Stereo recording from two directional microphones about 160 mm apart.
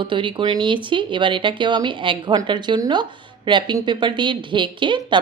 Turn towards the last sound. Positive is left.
turn(degrees=-30)  # may be behind; listen again after turning